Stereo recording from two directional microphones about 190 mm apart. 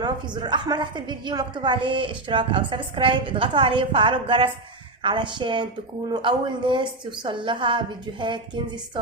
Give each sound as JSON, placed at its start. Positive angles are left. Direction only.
{"t": 0.0, "sound": "a woman's voice", "side_deg": -25}